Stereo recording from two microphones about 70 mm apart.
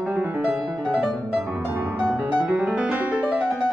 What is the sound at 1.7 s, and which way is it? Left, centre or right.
Music, right.